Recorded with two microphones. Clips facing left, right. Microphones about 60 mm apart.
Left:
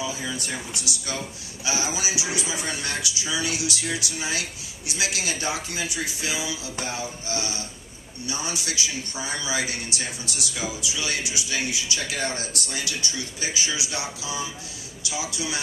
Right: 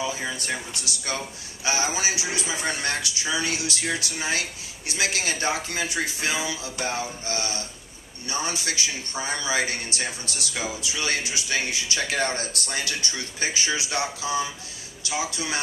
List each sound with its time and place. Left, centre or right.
0.0 s a man's voice: right